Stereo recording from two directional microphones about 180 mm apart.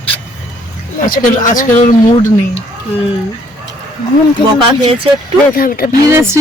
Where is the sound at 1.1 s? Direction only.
50° left (ahead or behind).